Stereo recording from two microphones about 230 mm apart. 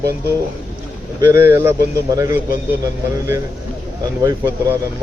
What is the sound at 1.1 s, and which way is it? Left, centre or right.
Speech, centre.